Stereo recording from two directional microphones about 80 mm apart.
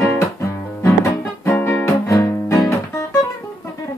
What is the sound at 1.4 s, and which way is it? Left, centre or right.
Music, left.